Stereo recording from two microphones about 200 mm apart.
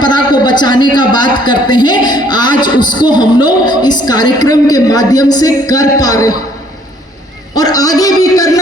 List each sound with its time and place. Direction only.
0.0 s a man's voice: 20° left (ahead or behind)
7.5 s speech: 20° left (ahead or behind)